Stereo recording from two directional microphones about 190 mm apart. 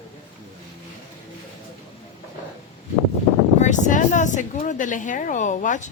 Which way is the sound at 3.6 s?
40° left (ahead or behind).